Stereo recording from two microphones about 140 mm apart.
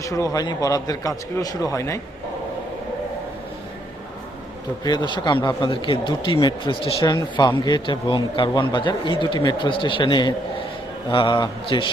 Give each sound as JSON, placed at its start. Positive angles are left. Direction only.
{"t": 0.0, "sound": "a man's voice", "side_deg": 25}
{"t": 4.8, "sound": "speech", "side_deg": 30}